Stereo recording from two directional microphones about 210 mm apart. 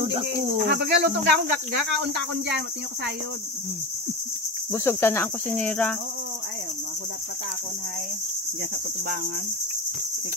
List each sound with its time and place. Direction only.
0.7 s cricket: 50° right (ahead or behind)
4.7 s cricket: 10° left (ahead or behind)